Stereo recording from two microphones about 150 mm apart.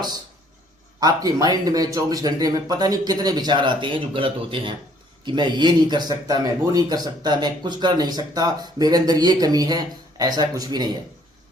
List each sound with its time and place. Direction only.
0.9 s speech: 25° right (ahead or behind)